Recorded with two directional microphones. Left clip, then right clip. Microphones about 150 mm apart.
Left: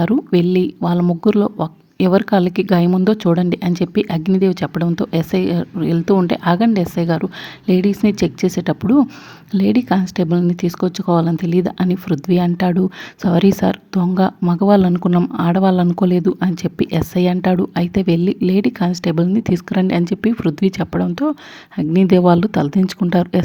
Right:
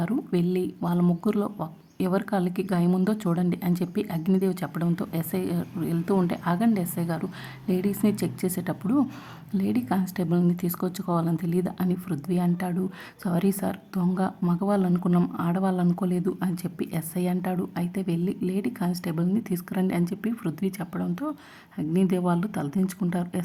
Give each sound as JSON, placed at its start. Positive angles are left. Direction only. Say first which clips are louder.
{"t": 0.0, "sound": "a woman's voice", "louder": "left 12 dB", "side_deg": 35}